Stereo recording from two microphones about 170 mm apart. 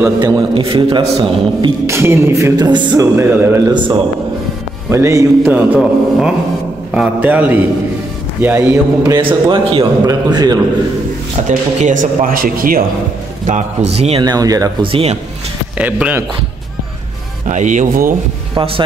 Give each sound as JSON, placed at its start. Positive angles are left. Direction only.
{"t": 0.2, "sound": "a man's voice", "side_deg": -25}
{"t": 1.9, "sound": "music", "side_deg": -15}
{"t": 3.7, "sound": "a man's voice", "side_deg": -25}
{"t": 4.8, "sound": "music", "side_deg": -15}
{"t": 5.8, "sound": "a man's voice", "side_deg": 0}
{"t": 6.9, "sound": "music", "side_deg": -10}
{"t": 9.0, "sound": "a man's voice", "side_deg": -25}
{"t": 11.4, "sound": "speech", "side_deg": -50}
{"t": 13.5, "sound": "a man's voice", "side_deg": -40}
{"t": 14.9, "sound": "a man's voice", "side_deg": -35}
{"t": 15.8, "sound": "music", "side_deg": -10}
{"t": 17.5, "sound": "speech", "side_deg": -45}
{"t": 18.5, "sound": "speech", "side_deg": -30}